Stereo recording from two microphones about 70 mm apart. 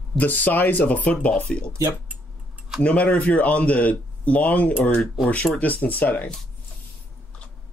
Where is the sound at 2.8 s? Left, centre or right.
Centre.